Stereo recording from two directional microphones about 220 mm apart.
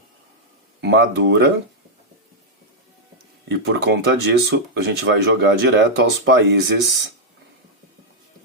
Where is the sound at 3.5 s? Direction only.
50° right (ahead or behind).